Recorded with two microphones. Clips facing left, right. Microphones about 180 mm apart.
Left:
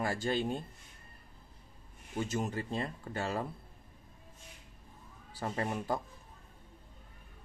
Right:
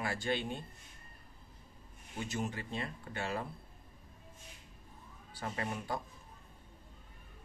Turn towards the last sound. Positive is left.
turn(degrees=35)  # may be behind; listen again after turning